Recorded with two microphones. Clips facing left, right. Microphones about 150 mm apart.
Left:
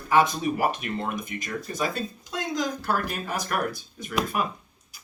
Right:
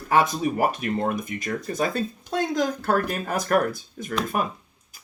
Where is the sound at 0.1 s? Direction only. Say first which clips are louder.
Right 1 dB; 45° right (ahead or behind).